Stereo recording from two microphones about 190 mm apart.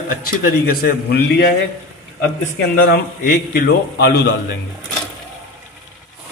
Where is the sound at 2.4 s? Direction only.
55° left (ahead or behind).